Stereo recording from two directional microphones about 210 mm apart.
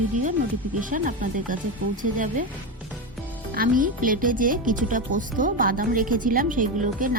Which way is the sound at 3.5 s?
40° right (ahead or behind).